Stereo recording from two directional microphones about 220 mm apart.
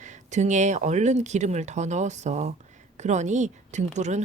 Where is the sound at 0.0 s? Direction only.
35° right (ahead or behind).